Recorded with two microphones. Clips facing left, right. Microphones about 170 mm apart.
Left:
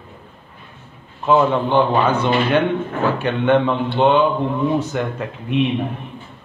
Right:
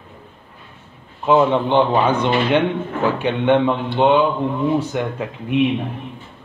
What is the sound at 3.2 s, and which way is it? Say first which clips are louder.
A man's voice: right 1 dB; 10° right (ahead or behind).